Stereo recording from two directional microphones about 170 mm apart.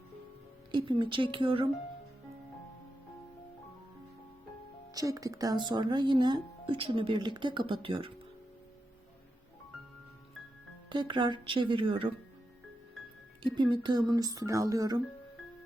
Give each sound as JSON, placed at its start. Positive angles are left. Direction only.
{"t": 0.7, "sound": "speech", "side_deg": -30}
{"t": 4.9, "sound": "speech", "side_deg": -20}
{"t": 10.8, "sound": "speech", "side_deg": -30}
{"t": 13.4, "sound": "speech", "side_deg": -25}